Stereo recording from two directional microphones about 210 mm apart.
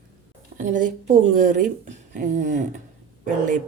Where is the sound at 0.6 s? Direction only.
40° right (ahead or behind).